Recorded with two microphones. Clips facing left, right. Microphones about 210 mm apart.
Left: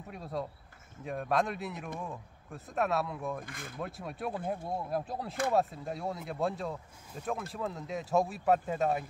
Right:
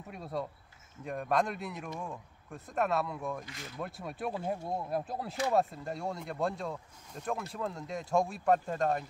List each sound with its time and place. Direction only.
0.1 s speech: centre (ahead or behind)
3.4 s speech: 50° left (ahead or behind)
3.8 s speech: centre (ahead or behind)